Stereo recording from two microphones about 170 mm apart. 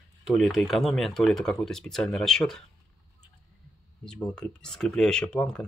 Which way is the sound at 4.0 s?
5° left (ahead or behind).